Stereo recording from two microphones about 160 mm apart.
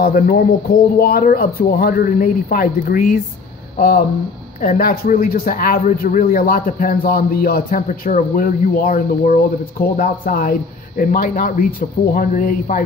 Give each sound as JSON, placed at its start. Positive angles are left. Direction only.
{"t": 0.0, "sound": "a man's voice", "side_deg": 65}